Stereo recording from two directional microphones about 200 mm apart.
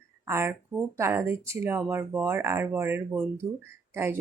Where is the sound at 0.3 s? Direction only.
10° right (ahead or behind).